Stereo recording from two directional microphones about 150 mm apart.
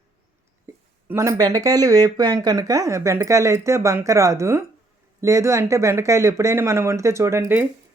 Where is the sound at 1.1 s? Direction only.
20° right (ahead or behind).